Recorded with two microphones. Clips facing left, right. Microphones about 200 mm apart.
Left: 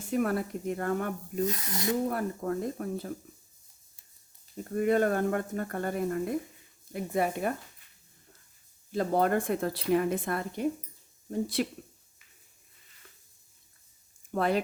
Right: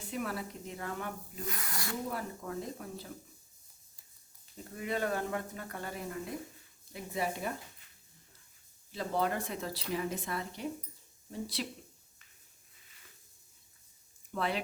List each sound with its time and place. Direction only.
0.1 s speech: 50° left (ahead or behind)
1.5 s speech: 25° left (ahead or behind)
2.0 s speech: 55° left (ahead or behind)
4.7 s speech: 50° left (ahead or behind)
8.9 s speech: 50° left (ahead or behind)
14.3 s speech: 45° left (ahead or behind)